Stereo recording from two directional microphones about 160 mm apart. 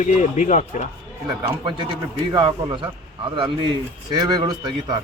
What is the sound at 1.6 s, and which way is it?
A man's voice, 30° right (ahead or behind).